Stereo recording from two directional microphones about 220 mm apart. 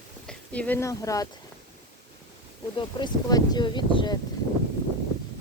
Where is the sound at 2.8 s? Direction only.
20° left (ahead or behind).